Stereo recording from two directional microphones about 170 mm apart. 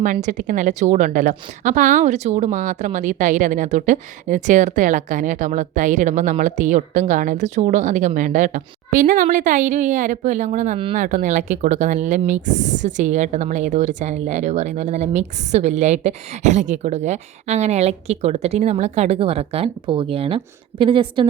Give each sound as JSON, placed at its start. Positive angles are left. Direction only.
{"t": 0.0, "sound": "a woman's voice", "side_deg": -50}